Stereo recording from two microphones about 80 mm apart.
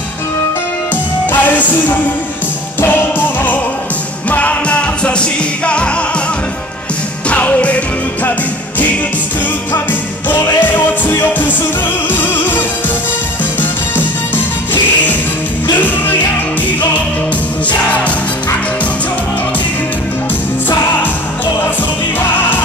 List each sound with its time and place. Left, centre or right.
1.2 s music: left
7.2 s music: centre
11.1 s music: left